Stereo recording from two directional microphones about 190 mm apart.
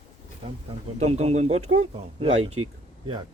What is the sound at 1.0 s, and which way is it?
Speech, 35° right (ahead or behind).